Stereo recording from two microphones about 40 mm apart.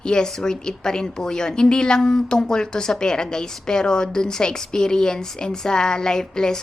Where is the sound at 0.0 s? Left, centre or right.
Centre.